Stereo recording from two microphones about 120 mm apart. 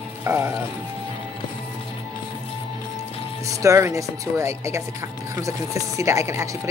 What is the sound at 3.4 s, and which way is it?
Speech, 25° right (ahead or behind).